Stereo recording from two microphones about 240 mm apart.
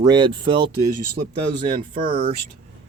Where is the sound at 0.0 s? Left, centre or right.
Centre.